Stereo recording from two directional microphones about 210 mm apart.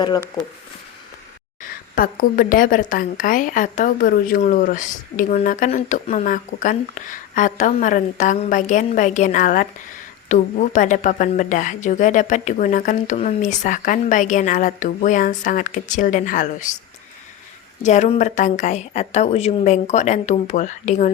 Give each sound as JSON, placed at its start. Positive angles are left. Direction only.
{"t": 1.6, "sound": "a woman's voice", "side_deg": 40}
{"t": 17.8, "sound": "a woman's voice", "side_deg": 35}